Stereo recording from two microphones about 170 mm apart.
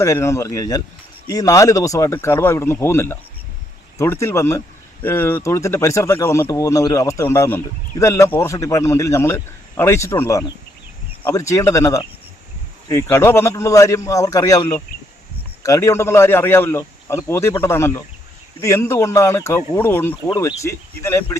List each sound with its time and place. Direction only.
0.0 s speech: 15° left (ahead or behind)